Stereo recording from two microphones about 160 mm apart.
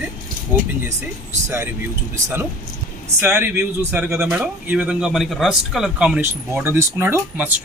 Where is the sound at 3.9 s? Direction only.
5° right (ahead or behind).